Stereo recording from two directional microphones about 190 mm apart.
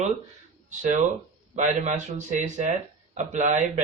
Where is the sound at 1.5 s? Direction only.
40° right (ahead or behind).